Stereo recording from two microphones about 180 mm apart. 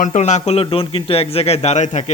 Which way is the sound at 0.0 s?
40° left (ahead or behind).